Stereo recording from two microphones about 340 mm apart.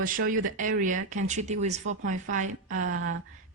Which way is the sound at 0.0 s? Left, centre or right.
Right.